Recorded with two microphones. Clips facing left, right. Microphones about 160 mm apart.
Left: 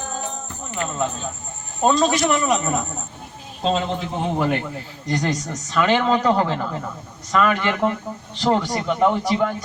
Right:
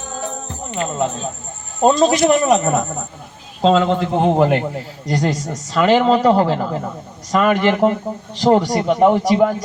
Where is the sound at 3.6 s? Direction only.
80° right.